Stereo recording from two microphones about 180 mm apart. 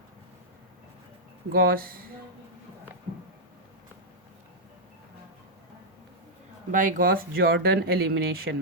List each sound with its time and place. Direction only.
1.5 s speech: 55° right (ahead or behind)
6.7 s speech: 45° right (ahead or behind); by 8.5 s 65° right (ahead or behind)